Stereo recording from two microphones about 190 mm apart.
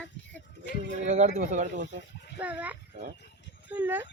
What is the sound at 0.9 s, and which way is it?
Speech, 40° right (ahead or behind).